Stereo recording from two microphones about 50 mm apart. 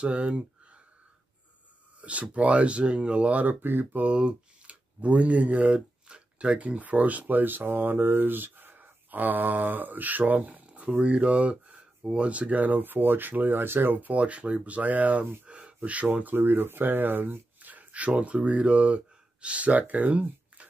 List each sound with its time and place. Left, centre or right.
0.0 s speech: right
2.0 s a sound: right
2.3 s speech: right
3.6 s speech: right
4.0 s speech: right
12.3 s speech: right